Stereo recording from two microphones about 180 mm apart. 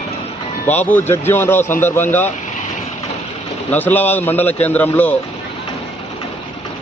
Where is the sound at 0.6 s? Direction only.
10° left (ahead or behind).